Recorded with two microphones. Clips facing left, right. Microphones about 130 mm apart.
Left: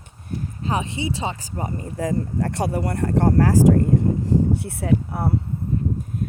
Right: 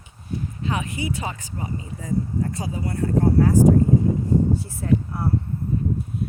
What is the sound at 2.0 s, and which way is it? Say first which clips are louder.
Speech: left 2 dB; 80° left.